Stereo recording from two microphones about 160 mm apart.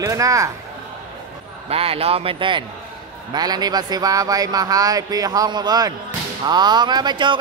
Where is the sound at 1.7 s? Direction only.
35° right (ahead or behind).